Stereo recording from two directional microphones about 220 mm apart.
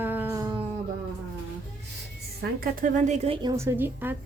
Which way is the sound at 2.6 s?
40° right (ahead or behind).